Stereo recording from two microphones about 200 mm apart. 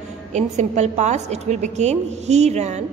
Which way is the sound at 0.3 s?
35° right (ahead or behind).